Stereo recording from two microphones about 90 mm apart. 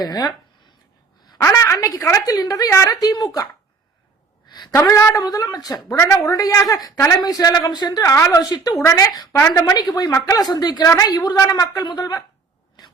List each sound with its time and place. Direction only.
0.0 s a woman's voice: 45° left (ahead or behind)
1.5 s a woman's voice: 30° left (ahead or behind)
2.9 s a woman's voice: 45° left (ahead or behind)
4.4 s a sound: 50° left (ahead or behind)
4.9 s a woman's voice: 35° left (ahead or behind)
8.4 s a woman's voice: 50° left (ahead or behind)
10.5 s a woman's voice: 50° left (ahead or behind)